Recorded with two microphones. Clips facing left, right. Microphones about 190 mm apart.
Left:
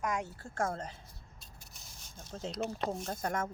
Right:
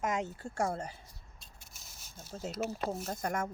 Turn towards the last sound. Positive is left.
turn(degrees=-10)  # may be behind; listen again after turning